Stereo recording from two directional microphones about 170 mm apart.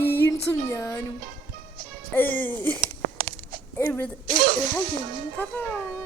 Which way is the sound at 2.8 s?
55° right (ahead or behind).